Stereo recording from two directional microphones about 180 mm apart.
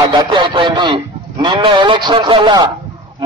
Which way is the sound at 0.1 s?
25° right (ahead or behind).